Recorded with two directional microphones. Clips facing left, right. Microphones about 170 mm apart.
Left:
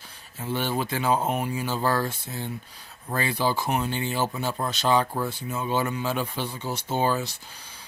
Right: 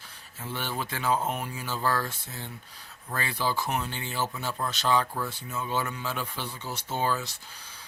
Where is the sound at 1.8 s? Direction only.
35° left (ahead or behind).